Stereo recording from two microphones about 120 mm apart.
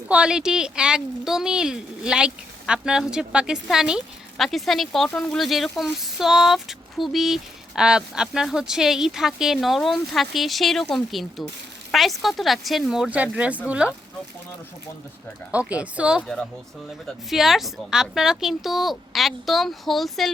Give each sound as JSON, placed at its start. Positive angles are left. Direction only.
{"t": 0.1, "sound": "a woman's voice", "side_deg": -5}
{"t": 15.5, "sound": "speech", "side_deg": -10}
{"t": 16.2, "sound": "a woman's voice", "side_deg": 5}